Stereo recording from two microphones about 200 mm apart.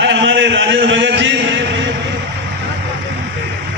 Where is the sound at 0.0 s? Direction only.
65° right (ahead or behind).